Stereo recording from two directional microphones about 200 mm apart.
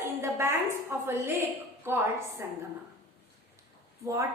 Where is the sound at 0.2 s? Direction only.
15° right (ahead or behind).